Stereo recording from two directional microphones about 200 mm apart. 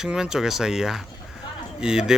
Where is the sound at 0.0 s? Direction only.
5° right (ahead or behind).